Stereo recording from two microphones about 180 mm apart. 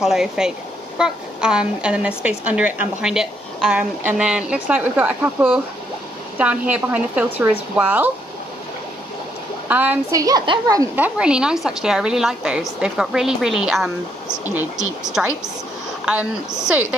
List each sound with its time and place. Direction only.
0.0 s a woman's voice: 5° right (ahead or behind)
9.7 s a woman's voice: 10° right (ahead or behind)
10.1 s speech: 20° right (ahead or behind)
11.0 s a woman's voice: 5° right (ahead or behind)